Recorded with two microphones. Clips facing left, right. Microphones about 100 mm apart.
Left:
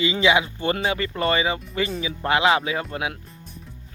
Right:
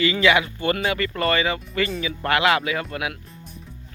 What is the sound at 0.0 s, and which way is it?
Speech, 20° left (ahead or behind).